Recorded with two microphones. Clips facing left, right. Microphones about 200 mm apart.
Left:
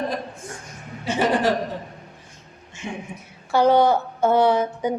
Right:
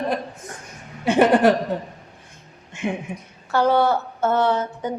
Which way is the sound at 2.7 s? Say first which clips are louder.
Right 8 dB; 60° right (ahead or behind).